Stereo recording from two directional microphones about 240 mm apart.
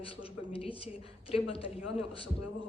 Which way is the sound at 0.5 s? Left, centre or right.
Left.